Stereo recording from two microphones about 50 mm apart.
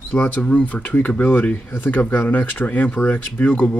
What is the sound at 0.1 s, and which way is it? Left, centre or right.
Speech, left.